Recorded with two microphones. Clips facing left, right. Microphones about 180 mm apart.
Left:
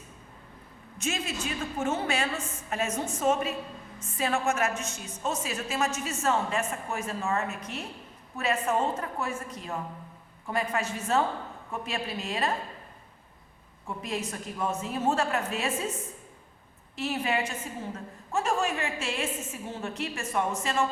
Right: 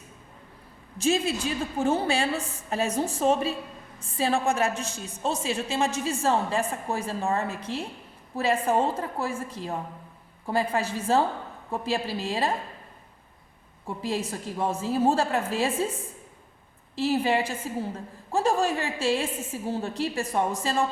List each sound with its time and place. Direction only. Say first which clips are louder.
0.9 s a woman's voice: right 8 dB; 35° right (ahead or behind)
13.8 s a woman's voice: right 4 dB; 30° right (ahead or behind)